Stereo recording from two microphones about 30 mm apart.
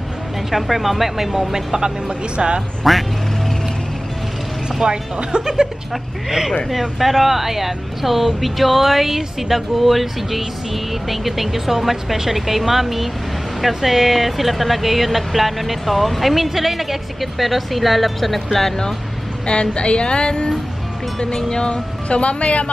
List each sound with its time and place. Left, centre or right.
0.5 s speech: centre
1.5 s speech: right
2.3 s speech: right
2.8 s speech: centre
4.8 s speech: right
5.4 s speech: right
6.7 s speech: centre
19.4 s speech: left
22.1 s speech: left